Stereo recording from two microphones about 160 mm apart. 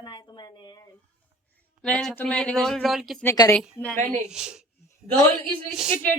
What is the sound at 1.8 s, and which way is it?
Speech, 5° left (ahead or behind).